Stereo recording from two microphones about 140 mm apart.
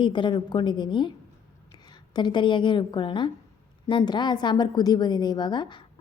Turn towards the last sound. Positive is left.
turn(degrees=30)  # may be behind; listen again after turning